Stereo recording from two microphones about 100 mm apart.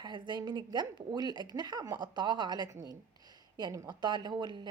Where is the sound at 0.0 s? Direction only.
50° right (ahead or behind).